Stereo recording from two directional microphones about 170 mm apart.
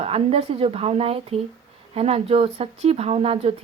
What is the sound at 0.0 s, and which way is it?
Speech, 35° right (ahead or behind).